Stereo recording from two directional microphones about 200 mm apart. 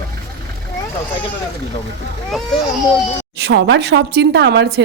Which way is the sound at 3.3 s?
60° right (ahead or behind).